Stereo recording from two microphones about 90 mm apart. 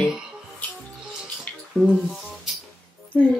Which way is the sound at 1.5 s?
15° left (ahead or behind).